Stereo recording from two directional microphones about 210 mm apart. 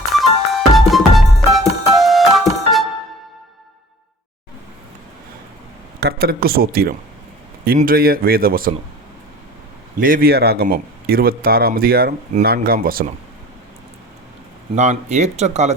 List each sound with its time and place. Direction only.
0.1 s music: centre (ahead or behind)
6.0 s speech: 45° right (ahead or behind)
10.0 s speech: 45° right (ahead or behind)
14.8 s speech: 35° right (ahead or behind)